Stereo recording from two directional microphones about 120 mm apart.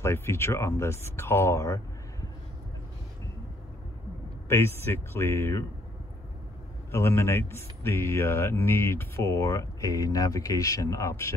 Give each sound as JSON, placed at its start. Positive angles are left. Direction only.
{"t": 0.0, "sound": "speech", "side_deg": 20}
{"t": 4.5, "sound": "speech", "side_deg": 20}
{"t": 6.9, "sound": "speech", "side_deg": 20}